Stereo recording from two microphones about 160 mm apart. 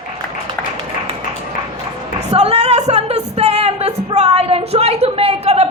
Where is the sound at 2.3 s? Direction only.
40° right (ahead or behind).